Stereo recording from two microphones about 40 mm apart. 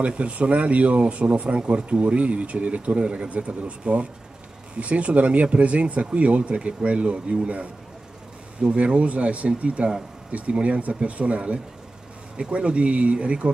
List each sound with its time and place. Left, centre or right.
0.0 s speech: right